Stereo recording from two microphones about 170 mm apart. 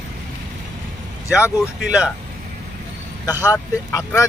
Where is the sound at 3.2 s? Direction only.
20° left (ahead or behind).